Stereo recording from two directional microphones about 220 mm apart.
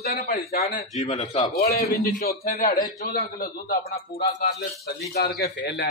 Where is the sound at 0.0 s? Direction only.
40° left (ahead or behind).